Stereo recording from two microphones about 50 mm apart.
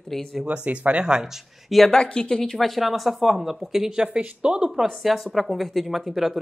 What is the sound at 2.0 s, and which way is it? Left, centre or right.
Speech, centre.